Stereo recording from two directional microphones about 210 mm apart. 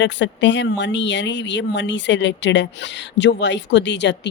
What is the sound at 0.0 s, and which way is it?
Speech, 60° left (ahead or behind).